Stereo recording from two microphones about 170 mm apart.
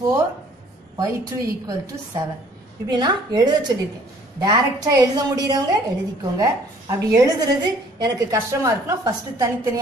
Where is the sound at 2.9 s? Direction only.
25° right (ahead or behind).